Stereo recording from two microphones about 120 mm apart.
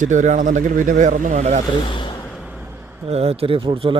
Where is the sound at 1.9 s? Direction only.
40° left (ahead or behind).